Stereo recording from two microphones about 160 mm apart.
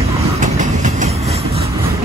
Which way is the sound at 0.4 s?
50° right (ahead or behind).